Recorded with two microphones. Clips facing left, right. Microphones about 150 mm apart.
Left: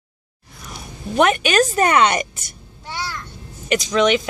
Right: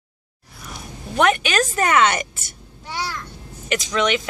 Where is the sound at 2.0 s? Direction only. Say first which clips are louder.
Left 2 dB; 20° left (ahead or behind).